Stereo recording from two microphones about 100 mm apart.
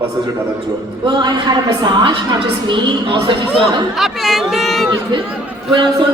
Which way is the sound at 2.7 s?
55° right (ahead or behind).